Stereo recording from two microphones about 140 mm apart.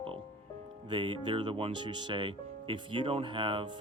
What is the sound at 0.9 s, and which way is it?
Speech, 35° right (ahead or behind).